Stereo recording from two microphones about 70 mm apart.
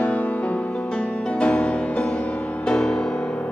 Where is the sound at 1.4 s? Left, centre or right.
Left.